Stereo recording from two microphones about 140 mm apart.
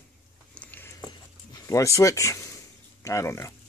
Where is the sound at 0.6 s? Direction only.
15° left (ahead or behind).